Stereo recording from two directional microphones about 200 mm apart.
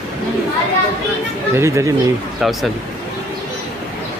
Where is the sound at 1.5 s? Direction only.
15° right (ahead or behind).